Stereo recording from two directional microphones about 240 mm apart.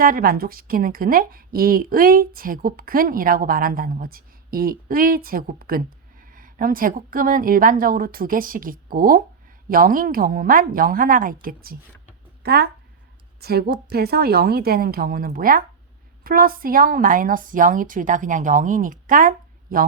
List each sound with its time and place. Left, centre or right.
0.0 s a woman's voice: right